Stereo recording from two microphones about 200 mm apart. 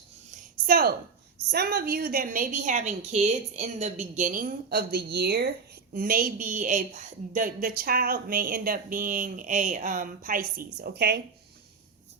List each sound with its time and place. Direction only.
0.5 s a woman's voice: 50° right (ahead or behind)